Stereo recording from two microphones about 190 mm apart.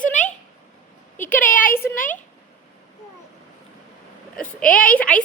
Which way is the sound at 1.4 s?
45° left (ahead or behind).